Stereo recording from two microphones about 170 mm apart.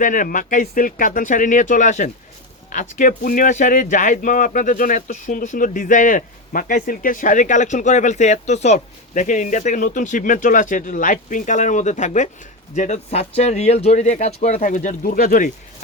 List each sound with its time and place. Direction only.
0.0 s speech: 50° left (ahead or behind)